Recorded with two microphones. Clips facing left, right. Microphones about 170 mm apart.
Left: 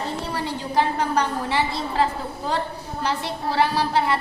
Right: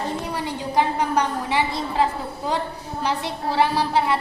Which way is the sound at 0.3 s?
15° right (ahead or behind).